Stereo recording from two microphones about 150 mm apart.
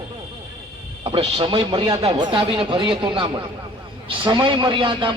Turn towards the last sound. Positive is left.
turn(degrees=-35)  # may be behind; listen again after turning